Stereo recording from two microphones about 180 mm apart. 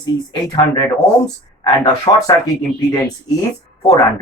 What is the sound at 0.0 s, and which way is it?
Speech, 25° left (ahead or behind).